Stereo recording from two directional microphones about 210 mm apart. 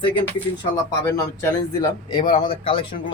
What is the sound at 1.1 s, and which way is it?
Speech, 10° left (ahead or behind).